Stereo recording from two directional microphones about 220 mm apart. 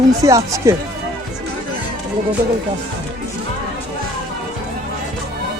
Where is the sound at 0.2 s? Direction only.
15° right (ahead or behind).